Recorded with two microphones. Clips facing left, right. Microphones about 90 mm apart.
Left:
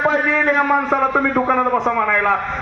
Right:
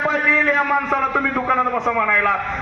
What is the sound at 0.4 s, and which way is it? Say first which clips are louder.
A man's voice: left 2 dB; 15° left (ahead or behind).